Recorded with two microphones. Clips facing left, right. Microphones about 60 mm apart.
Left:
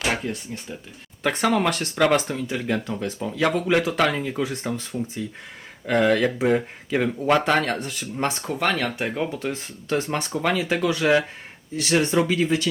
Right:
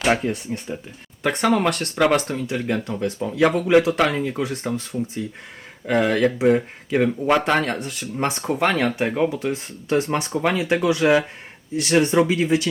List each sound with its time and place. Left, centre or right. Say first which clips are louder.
0.1 s speech: right 9 dB; right
1.2 s speech: right 2 dB; centre
8.4 s speech: right 6 dB; centre